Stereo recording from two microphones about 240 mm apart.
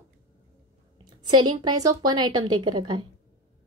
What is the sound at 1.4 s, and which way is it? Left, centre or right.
A woman's voice, centre.